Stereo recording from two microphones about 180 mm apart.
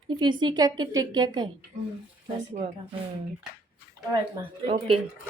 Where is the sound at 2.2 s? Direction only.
35° right (ahead or behind).